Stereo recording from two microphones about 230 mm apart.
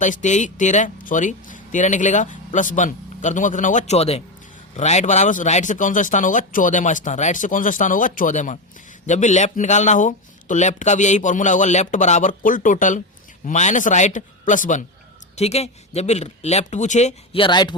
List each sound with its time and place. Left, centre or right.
0.0 s speech: left